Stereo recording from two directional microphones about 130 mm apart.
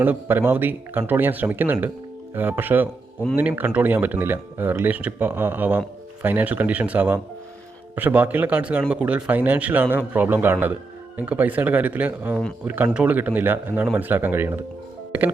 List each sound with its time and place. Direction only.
0.0 s speech: 15° right (ahead or behind)